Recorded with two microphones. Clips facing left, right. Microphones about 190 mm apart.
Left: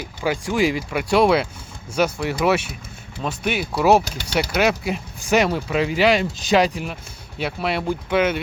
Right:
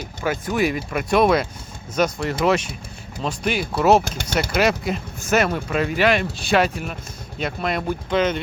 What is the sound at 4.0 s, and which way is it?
Speech, 50° right (ahead or behind).